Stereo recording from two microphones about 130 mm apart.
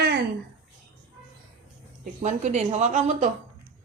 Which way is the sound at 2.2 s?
65° right (ahead or behind).